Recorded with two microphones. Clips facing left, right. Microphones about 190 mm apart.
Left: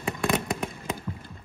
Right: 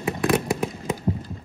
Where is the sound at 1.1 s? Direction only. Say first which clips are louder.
Right 11 dB; 45° right (ahead or behind).